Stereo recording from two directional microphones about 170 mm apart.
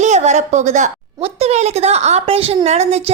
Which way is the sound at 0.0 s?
40° right (ahead or behind).